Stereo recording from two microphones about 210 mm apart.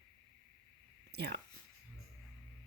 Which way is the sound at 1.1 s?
50° right (ahead or behind).